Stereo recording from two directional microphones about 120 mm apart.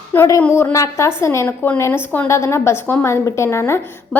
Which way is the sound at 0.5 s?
25° left (ahead or behind).